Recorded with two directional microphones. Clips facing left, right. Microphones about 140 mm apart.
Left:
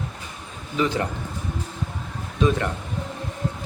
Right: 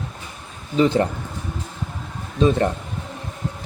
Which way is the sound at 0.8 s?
30° right (ahead or behind).